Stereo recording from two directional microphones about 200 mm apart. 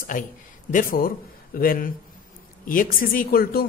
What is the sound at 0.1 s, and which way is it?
Speech, 40° left (ahead or behind).